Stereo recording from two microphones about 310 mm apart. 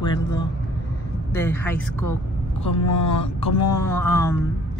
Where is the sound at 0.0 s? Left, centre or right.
Centre.